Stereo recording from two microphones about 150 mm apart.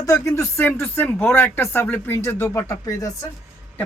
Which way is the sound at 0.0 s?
20° left (ahead or behind).